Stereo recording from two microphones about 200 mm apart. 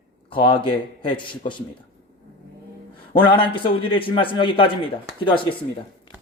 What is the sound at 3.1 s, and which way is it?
A man's voice, 25° left (ahead or behind).